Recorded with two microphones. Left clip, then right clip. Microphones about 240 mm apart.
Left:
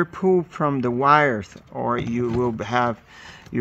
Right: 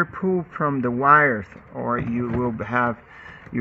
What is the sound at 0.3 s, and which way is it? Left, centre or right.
Speech, left.